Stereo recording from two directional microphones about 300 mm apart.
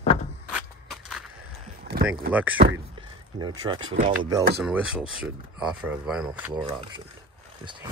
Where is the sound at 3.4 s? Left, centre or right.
Centre.